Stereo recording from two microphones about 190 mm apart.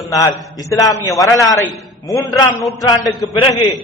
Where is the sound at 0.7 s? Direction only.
15° left (ahead or behind).